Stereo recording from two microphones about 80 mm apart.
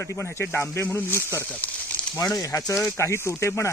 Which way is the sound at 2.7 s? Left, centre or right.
Left.